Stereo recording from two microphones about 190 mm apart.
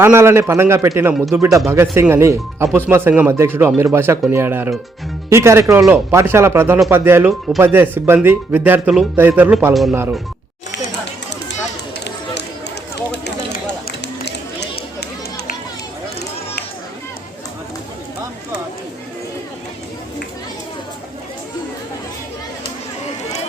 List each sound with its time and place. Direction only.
0.0 s speech: 15° right (ahead or behind)